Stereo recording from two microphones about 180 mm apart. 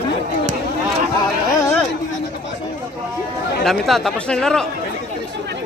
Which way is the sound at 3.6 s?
Centre (ahead or behind).